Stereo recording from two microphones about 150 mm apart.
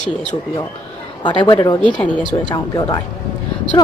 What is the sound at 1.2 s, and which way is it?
Speech, 30° left (ahead or behind).